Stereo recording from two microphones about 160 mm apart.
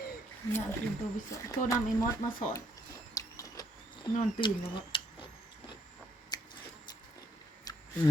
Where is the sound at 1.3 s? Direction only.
20° left (ahead or behind).